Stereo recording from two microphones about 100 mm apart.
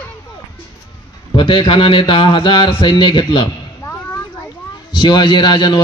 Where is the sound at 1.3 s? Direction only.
55° left (ahead or behind).